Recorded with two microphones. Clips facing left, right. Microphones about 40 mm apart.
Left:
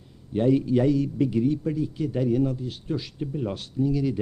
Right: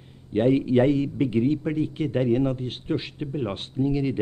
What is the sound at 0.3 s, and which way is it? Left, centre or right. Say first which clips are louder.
A man's voice: right 1 dB; right.